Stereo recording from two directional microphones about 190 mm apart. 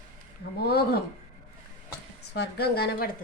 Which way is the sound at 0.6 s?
55° left (ahead or behind).